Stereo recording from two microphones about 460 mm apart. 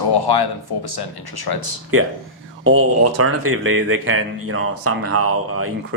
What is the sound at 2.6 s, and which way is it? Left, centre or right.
Speech, right.